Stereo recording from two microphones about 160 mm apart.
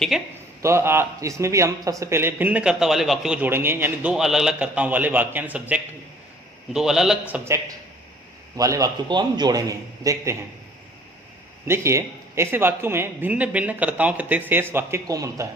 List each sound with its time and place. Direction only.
0.6 s a man's voice: 15° right (ahead or behind)
8.5 s a man's voice: 20° right (ahead or behind)
11.6 s speech: 15° right (ahead or behind)